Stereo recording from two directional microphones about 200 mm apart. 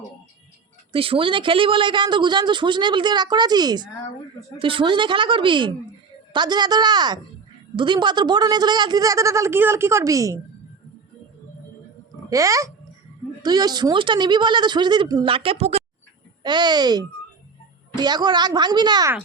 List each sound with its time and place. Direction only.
0.9 s a man's voice: 25° right (ahead or behind)
12.3 s a man's voice: 15° right (ahead or behind)